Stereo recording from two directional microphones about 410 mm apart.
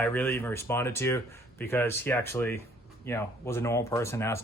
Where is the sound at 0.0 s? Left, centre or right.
Centre.